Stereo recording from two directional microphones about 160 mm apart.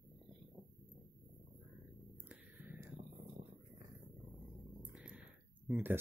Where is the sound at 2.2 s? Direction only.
10° right (ahead or behind).